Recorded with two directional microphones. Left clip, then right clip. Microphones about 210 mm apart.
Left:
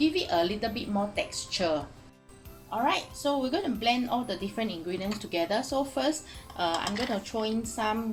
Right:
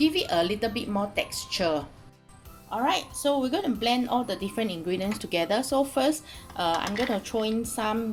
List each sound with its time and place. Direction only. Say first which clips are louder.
0.0 s a woman's voice: right 2 dB; 30° right (ahead or behind)